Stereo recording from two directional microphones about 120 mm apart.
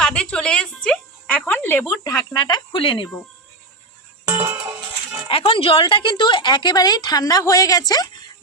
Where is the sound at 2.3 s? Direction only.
35° left (ahead or behind).